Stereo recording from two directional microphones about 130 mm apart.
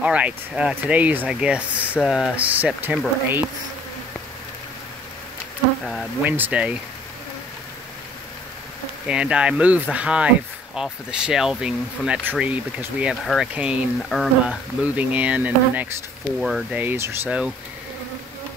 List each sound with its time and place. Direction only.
0.0 s speech: 10° right (ahead or behind)
6.2 s speech: 15° right (ahead or behind)
9.0 s speech: 5° right (ahead or behind)
14.0 s speech: centre (ahead or behind)
14.4 s speech: 10° right (ahead or behind)
16.3 s speech: centre (ahead or behind)
16.7 s speech: 15° right (ahead or behind)